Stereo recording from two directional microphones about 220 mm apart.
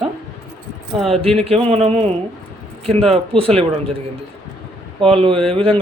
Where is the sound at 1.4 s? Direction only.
25° right (ahead or behind).